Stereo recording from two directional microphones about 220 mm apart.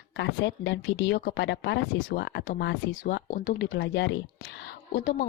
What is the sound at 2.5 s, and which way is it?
Speech, 45° left (ahead or behind).